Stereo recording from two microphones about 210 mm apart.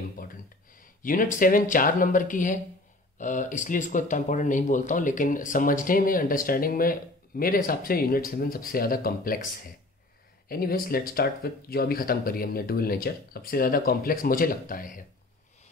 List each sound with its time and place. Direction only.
0.2 s speech: 40° left (ahead or behind)
10.5 s speech: 45° left (ahead or behind)